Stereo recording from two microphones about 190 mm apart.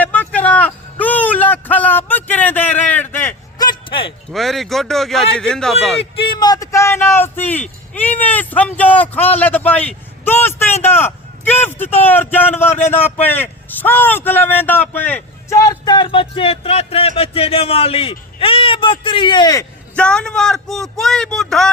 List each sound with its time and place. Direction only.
0.0 s music: 10° left (ahead or behind)
3.7 s a sound: 25° left (ahead or behind)
4.3 s speech: centre (ahead or behind)
6.3 s a man's voice: 20° left (ahead or behind)
20.0 s speech: 5° left (ahead or behind)